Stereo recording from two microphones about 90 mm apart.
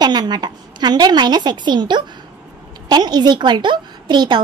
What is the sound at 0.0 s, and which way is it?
A woman's voice, 50° right (ahead or behind).